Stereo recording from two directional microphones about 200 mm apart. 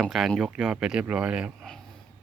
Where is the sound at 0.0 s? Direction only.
Centre (ahead or behind).